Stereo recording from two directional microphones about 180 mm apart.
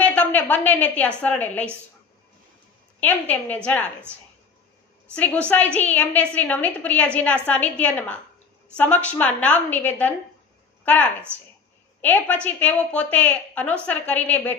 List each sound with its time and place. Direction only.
0.0 s a woman's voice: 10° left (ahead or behind)
3.0 s a woman's voice: 10° left (ahead or behind)
5.1 s a woman's voice: 10° left (ahead or behind)